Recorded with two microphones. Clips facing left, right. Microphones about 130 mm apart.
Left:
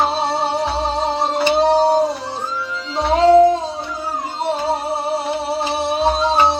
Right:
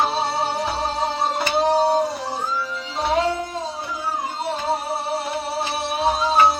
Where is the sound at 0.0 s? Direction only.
25° left (ahead or behind).